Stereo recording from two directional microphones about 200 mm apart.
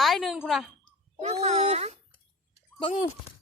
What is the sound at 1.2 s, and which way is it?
Speech, 30° right (ahead or behind).